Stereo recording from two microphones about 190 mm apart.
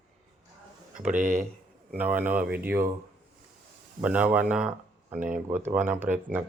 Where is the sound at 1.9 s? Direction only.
10° right (ahead or behind).